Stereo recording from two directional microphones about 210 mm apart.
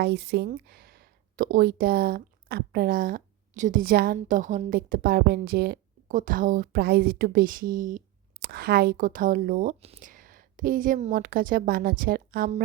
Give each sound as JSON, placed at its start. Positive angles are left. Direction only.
{"t": 0.0, "sound": "speech", "side_deg": -50}